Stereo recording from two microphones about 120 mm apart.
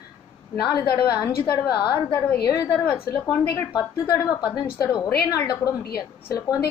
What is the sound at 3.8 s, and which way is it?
A woman's voice, 30° left (ahead or behind).